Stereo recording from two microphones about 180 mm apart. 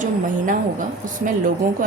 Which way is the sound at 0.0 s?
45° right (ahead or behind).